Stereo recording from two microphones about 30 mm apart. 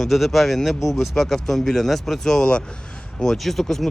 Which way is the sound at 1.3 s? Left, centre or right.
Centre.